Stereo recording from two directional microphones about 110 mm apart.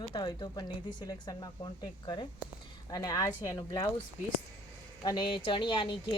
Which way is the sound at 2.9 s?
35° left (ahead or behind).